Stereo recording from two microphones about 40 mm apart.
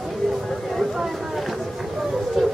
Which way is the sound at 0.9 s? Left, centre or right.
Centre.